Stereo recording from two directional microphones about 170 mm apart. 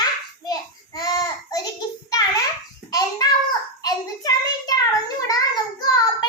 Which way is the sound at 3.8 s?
20° left (ahead or behind).